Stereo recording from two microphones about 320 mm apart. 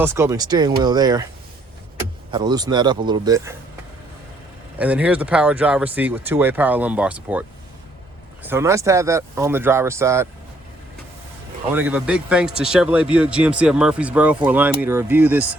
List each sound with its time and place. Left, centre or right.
0.0 s speech: centre
2.3 s speech: centre
4.8 s speech: centre
8.4 s speech: centre
11.7 s speech: centre